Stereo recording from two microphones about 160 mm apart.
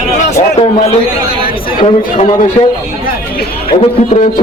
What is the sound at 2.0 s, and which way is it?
Speech, 55° left (ahead or behind).